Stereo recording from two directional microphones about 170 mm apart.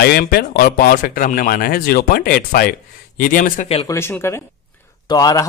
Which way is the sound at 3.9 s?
15° left (ahead or behind).